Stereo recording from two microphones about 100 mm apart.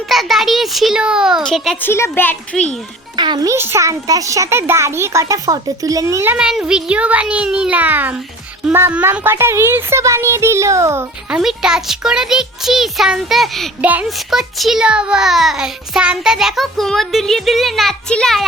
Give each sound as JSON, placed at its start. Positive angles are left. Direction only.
{"t": 0.1, "sound": "a child's voice", "side_deg": 0}
{"t": 1.8, "sound": "a child's voice", "side_deg": 25}
{"t": 3.2, "sound": "a child's voice", "side_deg": -50}
{"t": 3.4, "sound": "a child's voice", "side_deg": -25}
{"t": 6.3, "sound": "a child's voice", "side_deg": -10}
{"t": 11.3, "sound": "a child's voice", "side_deg": -5}
{"t": 13.8, "sound": "a child's voice", "side_deg": -15}
{"t": 14.2, "sound": "a child's voice", "side_deg": 0}